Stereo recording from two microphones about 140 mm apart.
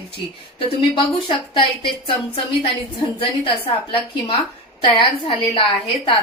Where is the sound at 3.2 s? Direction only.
40° left (ahead or behind).